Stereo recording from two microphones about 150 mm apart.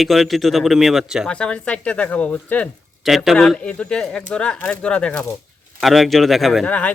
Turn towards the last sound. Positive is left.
turn(degrees=10)  # may be behind; listen again after turning